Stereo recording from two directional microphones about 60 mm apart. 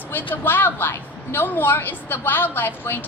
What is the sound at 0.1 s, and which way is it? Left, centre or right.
A woman's voice, left.